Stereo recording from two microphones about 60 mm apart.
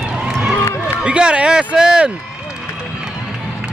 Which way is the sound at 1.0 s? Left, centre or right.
Centre.